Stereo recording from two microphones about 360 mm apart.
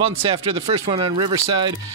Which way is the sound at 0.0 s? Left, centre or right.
Centre.